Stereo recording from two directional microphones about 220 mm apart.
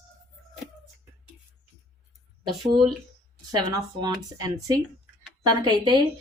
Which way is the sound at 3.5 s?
20° right (ahead or behind).